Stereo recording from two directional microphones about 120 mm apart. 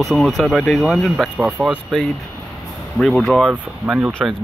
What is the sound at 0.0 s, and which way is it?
Speech, centre (ahead or behind).